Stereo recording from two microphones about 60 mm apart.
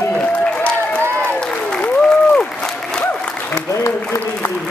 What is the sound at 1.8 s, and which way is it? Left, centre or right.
Applause, centre.